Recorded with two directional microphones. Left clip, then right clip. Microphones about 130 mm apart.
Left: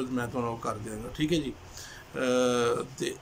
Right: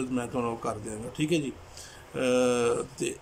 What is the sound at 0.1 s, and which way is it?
Speech, 15° right (ahead or behind).